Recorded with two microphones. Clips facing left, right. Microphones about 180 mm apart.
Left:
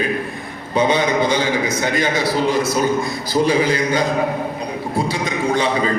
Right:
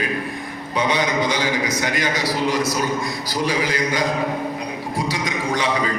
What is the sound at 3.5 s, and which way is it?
Speech, 25° left (ahead or behind).